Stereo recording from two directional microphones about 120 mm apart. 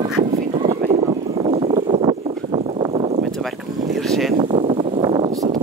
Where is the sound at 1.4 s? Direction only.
60° right (ahead or behind).